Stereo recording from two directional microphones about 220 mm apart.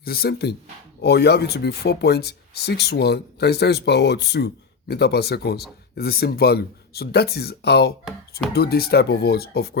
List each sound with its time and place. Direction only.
0.0 s speech: 45° left (ahead or behind)